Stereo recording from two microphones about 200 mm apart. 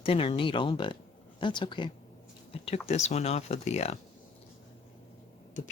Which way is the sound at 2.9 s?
35° left (ahead or behind).